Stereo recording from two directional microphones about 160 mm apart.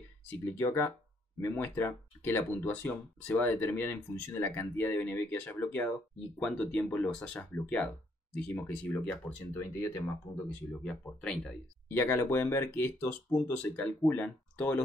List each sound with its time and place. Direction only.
0.3 s speech: 15° left (ahead or behind)
10.7 s speech: 5° left (ahead or behind)